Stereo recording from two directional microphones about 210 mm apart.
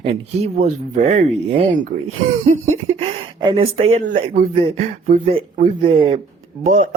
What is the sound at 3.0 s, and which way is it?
Speech, 25° right (ahead or behind).